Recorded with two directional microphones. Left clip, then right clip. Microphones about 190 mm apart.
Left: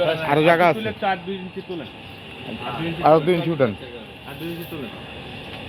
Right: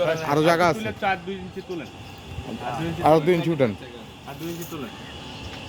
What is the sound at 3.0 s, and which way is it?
Speech, 25° right (ahead or behind).